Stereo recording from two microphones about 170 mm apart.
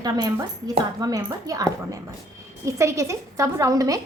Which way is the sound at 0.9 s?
20° right (ahead or behind).